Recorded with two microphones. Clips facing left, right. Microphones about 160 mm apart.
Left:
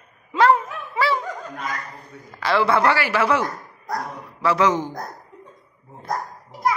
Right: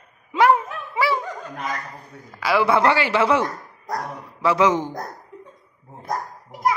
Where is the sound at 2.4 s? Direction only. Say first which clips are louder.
Right 1 dB; 15° right (ahead or behind).